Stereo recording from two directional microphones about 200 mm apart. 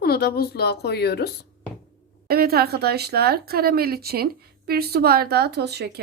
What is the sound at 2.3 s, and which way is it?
Speech, 50° right (ahead or behind).